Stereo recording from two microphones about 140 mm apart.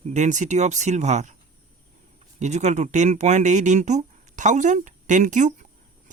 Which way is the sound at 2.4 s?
55° right (ahead or behind).